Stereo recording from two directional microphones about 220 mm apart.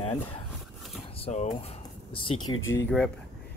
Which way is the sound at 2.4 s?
65° left (ahead or behind).